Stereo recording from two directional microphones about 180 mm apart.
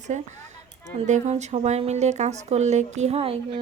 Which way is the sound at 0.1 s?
40° right (ahead or behind).